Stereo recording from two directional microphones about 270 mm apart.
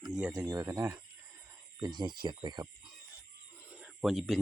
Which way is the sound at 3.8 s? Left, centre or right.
Centre.